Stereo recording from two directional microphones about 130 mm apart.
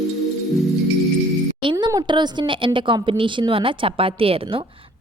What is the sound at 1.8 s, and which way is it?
A woman's voice, 30° right (ahead or behind).